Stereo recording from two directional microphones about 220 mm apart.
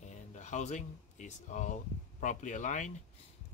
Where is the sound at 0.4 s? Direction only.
30° left (ahead or behind).